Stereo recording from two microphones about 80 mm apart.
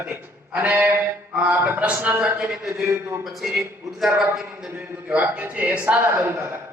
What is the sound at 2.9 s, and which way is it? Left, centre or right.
Speech, right.